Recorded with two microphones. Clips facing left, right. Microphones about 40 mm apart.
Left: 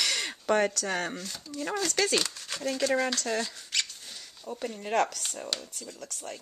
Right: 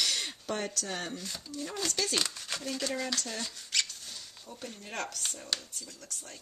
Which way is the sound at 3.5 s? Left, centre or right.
Centre.